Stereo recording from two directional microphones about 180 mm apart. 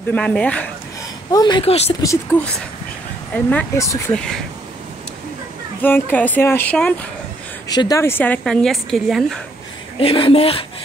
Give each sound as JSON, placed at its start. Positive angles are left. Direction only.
{"t": 0.1, "sound": "a woman's voice", "side_deg": 5}
{"t": 1.3, "sound": "a woman's voice", "side_deg": 25}
{"t": 2.3, "sound": "a woman's voice", "side_deg": 10}
{"t": 4.1, "sound": "speech", "side_deg": 5}
{"t": 5.8, "sound": "a woman's voice", "side_deg": 10}
{"t": 7.6, "sound": "a woman's voice", "side_deg": 20}
{"t": 9.9, "sound": "a woman's voice", "side_deg": 30}